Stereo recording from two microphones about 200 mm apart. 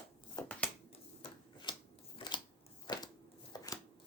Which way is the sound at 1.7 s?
20° left (ahead or behind).